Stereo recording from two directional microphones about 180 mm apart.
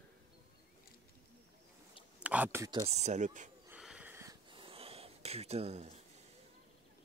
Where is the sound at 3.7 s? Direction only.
5° right (ahead or behind).